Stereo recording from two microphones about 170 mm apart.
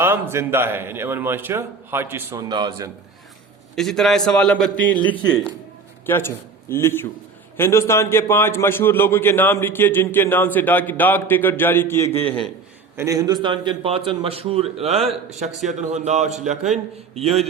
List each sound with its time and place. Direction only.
0.0 s a man's voice: 15° right (ahead or behind)
3.8 s a man's voice: centre (ahead or behind)
13.0 s a man's voice: 20° right (ahead or behind); by 17.4 s 35° right (ahead or behind)